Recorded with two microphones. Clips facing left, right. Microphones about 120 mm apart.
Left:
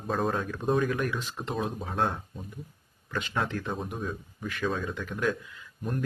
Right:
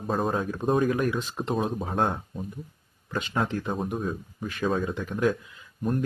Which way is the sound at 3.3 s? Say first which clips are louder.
Right 3 dB; 25° right (ahead or behind).